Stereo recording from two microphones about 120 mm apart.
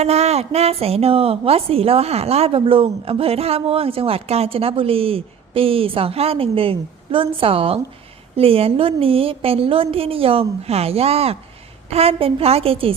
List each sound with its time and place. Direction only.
0.0 s a woman's voice: 60° right (ahead or behind)